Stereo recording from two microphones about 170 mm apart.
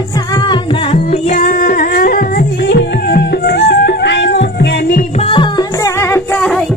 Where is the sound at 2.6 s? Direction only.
80° left.